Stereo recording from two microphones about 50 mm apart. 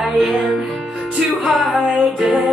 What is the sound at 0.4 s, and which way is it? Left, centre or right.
Music, centre.